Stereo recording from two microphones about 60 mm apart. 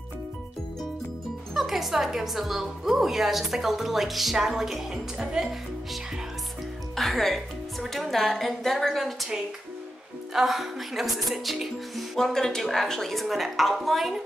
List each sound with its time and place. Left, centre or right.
1.5 s speech: centre
7.0 s a woman's voice: centre
10.3 s speech: centre